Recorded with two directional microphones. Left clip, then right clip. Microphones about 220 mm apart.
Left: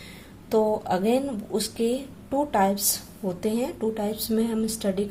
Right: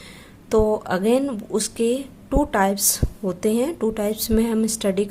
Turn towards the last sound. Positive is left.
turn(degrees=-30)  # may be behind; listen again after turning